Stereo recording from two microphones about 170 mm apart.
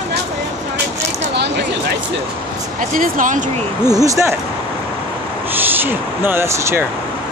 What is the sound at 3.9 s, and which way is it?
Speech, 20° right (ahead or behind).